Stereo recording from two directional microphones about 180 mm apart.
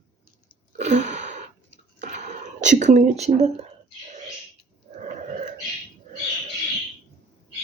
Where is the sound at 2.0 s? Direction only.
40° right (ahead or behind).